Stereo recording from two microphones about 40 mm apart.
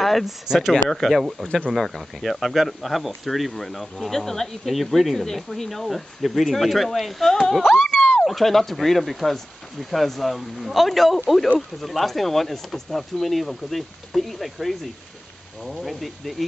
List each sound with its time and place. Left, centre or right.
0.0 s speech: centre
1.1 s speech: centre
8.0 s a sound: centre
8.3 s speech: centre